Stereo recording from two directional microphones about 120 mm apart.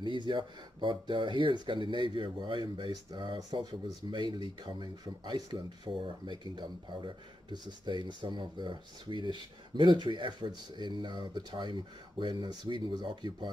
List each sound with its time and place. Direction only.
0.0 s speech: 40° right (ahead or behind)